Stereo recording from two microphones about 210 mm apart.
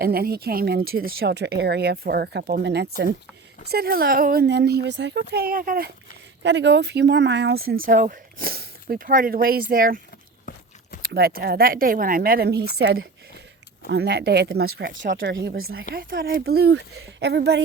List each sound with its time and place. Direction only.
0.0 s speech: 45° right (ahead or behind)
6.4 s speech: 60° right (ahead or behind)
7.7 s speech: 40° right (ahead or behind)
10.5 s a sound: 40° left (ahead or behind)
11.0 s speech: 45° right (ahead or behind)
13.9 s speech: 55° right (ahead or behind)
15.5 s speech: 80° right
16.0 s speech: 45° right (ahead or behind)